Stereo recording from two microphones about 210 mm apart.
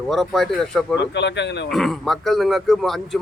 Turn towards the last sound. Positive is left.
turn(degrees=0)  # may be behind; listen again after turning